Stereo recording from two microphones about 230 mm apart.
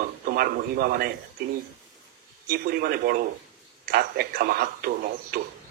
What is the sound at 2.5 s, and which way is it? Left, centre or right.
A man's voice, right.